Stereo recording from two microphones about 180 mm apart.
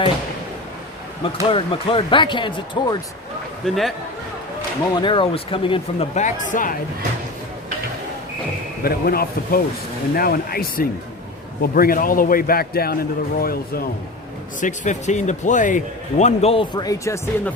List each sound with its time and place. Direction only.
1.2 s speech: 30° left (ahead or behind)
3.6 s a man's voice: 5° left (ahead or behind)
4.9 s speech: 25° left (ahead or behind); by 6.7 s 45° left (ahead or behind)
8.8 s a man's voice: 55° left (ahead or behind)
14.6 s speech: 40° left (ahead or behind); by 17.5 s 15° left (ahead or behind)